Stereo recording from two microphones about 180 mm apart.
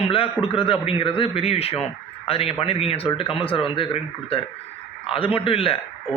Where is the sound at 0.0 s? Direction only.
30° left (ahead or behind).